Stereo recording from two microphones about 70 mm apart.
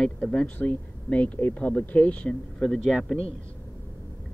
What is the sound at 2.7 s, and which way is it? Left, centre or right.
Speech, centre.